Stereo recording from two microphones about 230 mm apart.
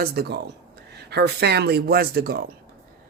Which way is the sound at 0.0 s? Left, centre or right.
Right.